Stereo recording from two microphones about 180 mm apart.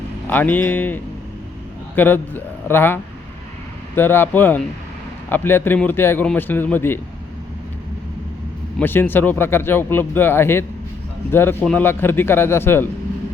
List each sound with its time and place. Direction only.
0.3 s speech: 10° left (ahead or behind)
8.8 s speech: 10° left (ahead or behind)